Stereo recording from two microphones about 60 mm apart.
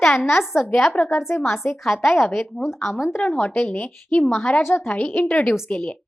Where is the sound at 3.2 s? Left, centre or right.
Left.